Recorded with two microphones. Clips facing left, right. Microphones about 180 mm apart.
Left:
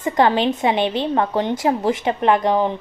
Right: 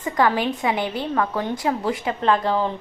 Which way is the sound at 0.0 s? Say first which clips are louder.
Left 4 dB; 25° left (ahead or behind).